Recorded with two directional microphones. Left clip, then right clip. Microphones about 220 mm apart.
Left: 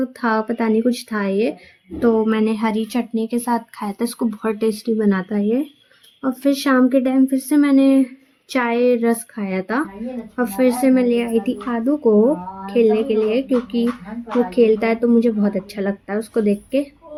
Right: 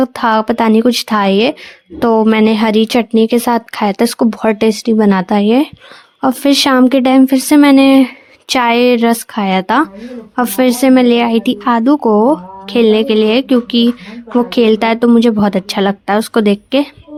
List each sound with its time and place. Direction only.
0.0 s a woman's voice: 40° right (ahead or behind)